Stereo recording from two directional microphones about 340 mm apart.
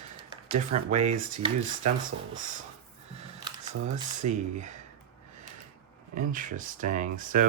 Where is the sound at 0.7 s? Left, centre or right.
Centre.